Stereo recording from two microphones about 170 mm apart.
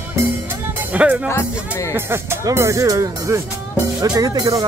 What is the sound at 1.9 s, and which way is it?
Speech, 15° right (ahead or behind).